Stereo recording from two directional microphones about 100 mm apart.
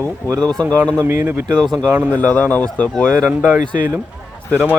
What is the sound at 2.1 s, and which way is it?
Speech, 15° left (ahead or behind).